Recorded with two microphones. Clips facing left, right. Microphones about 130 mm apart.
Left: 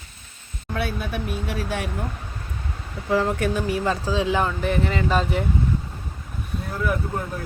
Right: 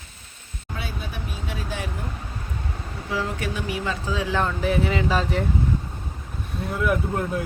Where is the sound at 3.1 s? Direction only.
50° left (ahead or behind).